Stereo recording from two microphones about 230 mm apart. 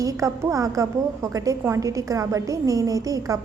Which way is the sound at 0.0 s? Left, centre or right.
Centre.